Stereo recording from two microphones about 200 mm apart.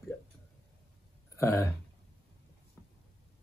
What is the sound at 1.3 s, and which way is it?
Speech, 15° left (ahead or behind).